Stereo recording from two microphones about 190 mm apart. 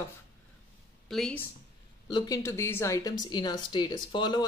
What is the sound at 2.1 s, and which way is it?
Speech, 20° left (ahead or behind).